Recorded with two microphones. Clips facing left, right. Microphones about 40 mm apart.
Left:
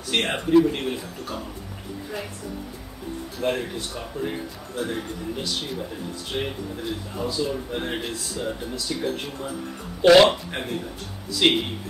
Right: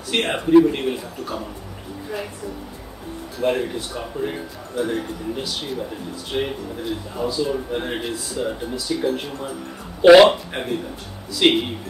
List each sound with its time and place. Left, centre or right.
0.1 s a man's voice: centre
3.3 s a man's voice: centre